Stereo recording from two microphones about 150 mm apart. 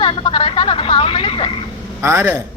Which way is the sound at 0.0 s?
35° left (ahead or behind).